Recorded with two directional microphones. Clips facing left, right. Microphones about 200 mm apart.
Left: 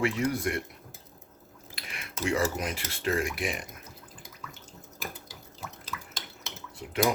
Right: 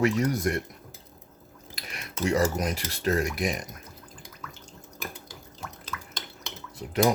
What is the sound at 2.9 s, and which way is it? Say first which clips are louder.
Speech: right 2 dB; 40° right (ahead or behind).